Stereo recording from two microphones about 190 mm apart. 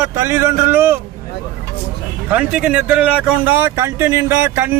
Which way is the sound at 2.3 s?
5° right (ahead or behind).